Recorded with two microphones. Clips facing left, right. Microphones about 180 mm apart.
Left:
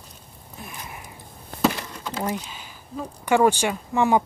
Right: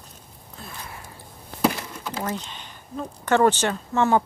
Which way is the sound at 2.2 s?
10° left (ahead or behind).